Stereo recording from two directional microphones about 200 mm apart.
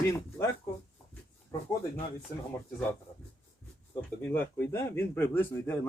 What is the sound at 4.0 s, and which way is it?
A man's voice, 10° left (ahead or behind).